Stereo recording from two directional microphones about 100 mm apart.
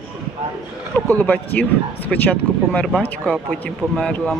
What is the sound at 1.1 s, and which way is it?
Speech, 15° left (ahead or behind).